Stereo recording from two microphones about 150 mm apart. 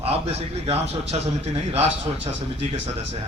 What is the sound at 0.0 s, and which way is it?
Speech, 45° right (ahead or behind).